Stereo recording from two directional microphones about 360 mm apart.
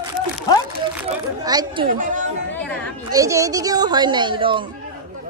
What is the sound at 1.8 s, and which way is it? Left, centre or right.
Speech, right.